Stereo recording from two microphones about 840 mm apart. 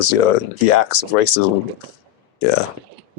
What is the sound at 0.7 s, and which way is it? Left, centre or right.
Speech, left.